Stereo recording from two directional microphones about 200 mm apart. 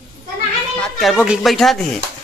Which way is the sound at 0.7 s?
5° left (ahead or behind).